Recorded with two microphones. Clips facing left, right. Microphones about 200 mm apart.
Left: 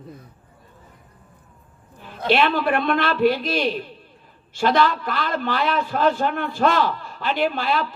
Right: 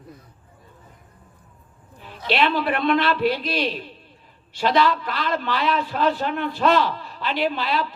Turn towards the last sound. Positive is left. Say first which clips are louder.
# left 1 dB
turn(degrees=45)  # may be behind; listen again after turning